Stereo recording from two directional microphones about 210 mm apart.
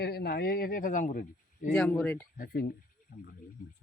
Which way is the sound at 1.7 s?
5° left (ahead or behind).